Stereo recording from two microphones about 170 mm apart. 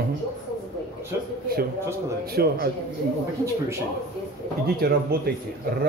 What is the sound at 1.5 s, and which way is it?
Speech, 60° right (ahead or behind).